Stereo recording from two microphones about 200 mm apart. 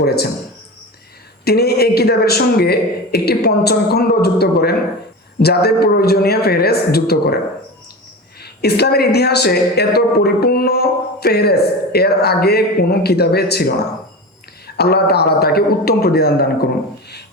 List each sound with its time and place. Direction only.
1.5 s a woman's voice: 50° left (ahead or behind)
8.4 s a woman's voice: 55° left (ahead or behind)
14.8 s a woman's voice: 55° left (ahead or behind)